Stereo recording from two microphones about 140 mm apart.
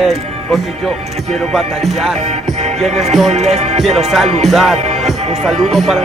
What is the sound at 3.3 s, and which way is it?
Music, 50° right (ahead or behind).